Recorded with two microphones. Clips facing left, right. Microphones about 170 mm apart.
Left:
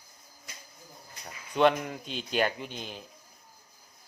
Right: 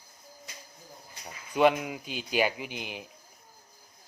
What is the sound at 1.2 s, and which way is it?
Speech, 5° right (ahead or behind).